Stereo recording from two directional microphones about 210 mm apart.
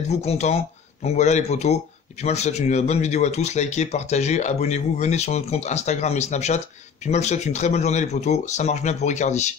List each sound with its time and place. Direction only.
0.1 s speech: 30° left (ahead or behind)